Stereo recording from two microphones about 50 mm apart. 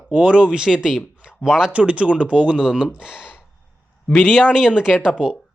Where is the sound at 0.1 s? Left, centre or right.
Right.